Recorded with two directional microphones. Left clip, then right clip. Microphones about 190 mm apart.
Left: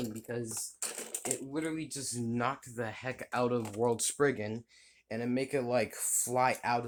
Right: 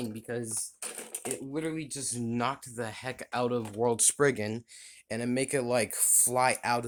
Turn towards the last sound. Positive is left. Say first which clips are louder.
# right 3 dB
turn(degrees=-35)  # may be behind; listen again after turning